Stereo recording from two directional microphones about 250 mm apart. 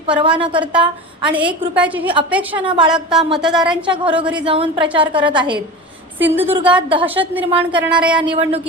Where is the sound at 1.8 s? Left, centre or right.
Centre.